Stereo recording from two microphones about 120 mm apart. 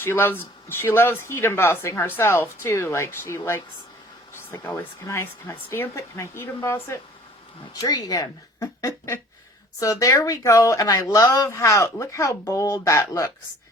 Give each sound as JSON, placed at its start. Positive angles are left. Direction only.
{"t": 0.0, "sound": "speech", "side_deg": 15}
{"t": 4.6, "sound": "speech", "side_deg": 25}
{"t": 7.8, "sound": "speech", "side_deg": 35}